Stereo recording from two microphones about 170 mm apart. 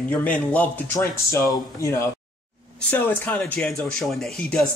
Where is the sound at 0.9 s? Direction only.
20° left (ahead or behind).